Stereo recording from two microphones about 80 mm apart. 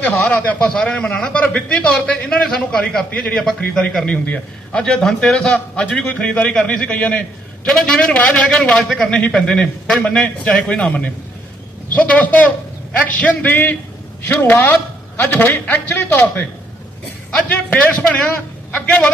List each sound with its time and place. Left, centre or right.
0.0 s a man's voice: centre
17.5 s a man's voice: centre